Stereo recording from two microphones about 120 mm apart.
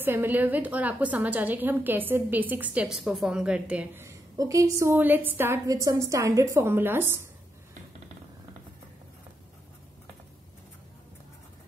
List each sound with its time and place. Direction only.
0.0 s a woman's voice: 15° right (ahead or behind)
5.9 s a woman's voice: 30° right (ahead or behind)